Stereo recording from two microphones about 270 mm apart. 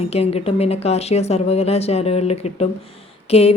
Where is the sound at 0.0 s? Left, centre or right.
Left.